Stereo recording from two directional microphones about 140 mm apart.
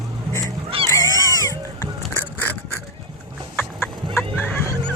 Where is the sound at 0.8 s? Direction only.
20° left (ahead or behind).